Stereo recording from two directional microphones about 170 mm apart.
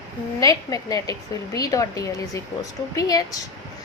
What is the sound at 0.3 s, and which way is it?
A woman's voice, 20° left (ahead or behind).